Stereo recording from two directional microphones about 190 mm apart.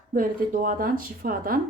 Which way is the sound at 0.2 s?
45° right (ahead or behind).